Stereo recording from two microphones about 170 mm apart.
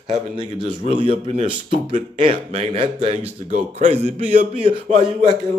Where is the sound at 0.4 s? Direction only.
30° right (ahead or behind).